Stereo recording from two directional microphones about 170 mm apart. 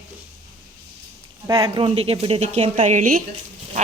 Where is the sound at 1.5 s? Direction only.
30° right (ahead or behind); by 3.2 s 50° right (ahead or behind).